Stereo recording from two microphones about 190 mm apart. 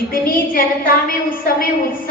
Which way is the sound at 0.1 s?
50° left (ahead or behind).